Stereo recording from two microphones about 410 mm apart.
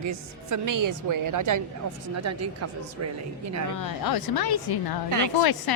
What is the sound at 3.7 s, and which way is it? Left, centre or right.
A woman's voice, left.